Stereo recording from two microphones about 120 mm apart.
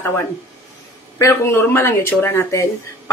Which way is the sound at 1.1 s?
20° left (ahead or behind).